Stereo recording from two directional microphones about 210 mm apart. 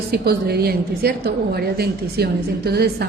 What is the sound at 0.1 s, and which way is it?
A woman's voice, 50° right (ahead or behind).